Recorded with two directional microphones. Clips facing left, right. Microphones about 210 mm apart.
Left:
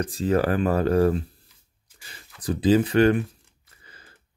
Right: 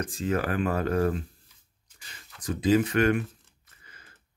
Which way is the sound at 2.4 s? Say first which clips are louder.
Left 3 dB; 35° left (ahead or behind).